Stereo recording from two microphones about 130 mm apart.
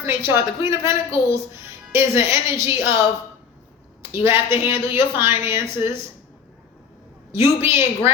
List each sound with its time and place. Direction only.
0.1 s speech: 20° right (ahead or behind)
4.1 s speech: 20° right (ahead or behind)
7.3 s speech: 20° right (ahead or behind)